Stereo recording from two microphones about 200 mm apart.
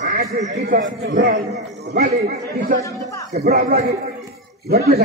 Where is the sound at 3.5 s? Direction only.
50° right (ahead or behind).